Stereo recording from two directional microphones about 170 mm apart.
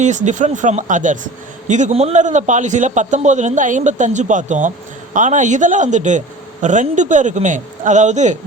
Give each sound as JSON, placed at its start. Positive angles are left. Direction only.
{"t": 0.0, "sound": "speech", "side_deg": -45}